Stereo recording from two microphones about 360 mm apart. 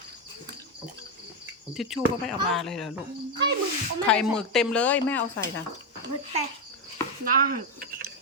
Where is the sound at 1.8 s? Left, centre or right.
Centre.